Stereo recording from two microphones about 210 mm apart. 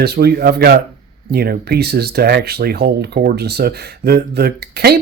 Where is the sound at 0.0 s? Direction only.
50° right (ahead or behind).